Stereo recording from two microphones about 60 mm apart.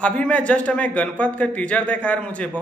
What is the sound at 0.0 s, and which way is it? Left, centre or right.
A man's voice, centre.